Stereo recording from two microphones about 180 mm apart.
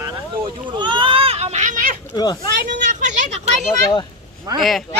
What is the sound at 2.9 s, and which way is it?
Speech, 40° right (ahead or behind).